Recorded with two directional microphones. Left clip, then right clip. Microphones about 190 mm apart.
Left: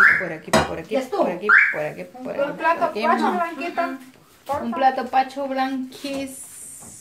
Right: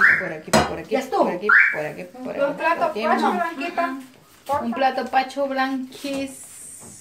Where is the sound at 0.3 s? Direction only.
20° left (ahead or behind).